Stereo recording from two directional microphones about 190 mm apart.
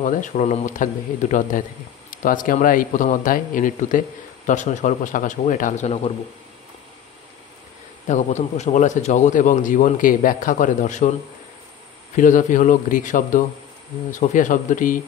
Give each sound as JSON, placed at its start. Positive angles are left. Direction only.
{"t": 0.0, "sound": "a man's voice", "side_deg": 40}
{"t": 8.1, "sound": "a man's voice", "side_deg": 35}
{"t": 12.2, "sound": "a man's voice", "side_deg": 45}